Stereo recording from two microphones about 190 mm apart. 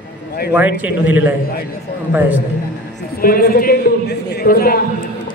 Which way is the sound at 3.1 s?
50° left (ahead or behind).